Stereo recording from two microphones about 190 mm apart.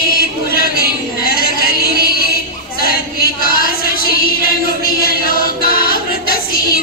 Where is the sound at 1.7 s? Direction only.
55° right (ahead or behind).